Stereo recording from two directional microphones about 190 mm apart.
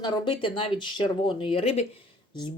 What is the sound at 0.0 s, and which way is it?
Speech, 25° left (ahead or behind).